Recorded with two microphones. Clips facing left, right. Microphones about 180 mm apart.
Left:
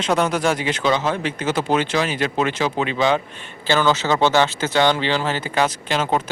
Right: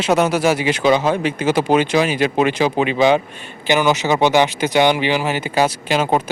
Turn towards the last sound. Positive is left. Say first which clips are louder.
# right 4 dB
turn(degrees=-10)  # may be behind; listen again after turning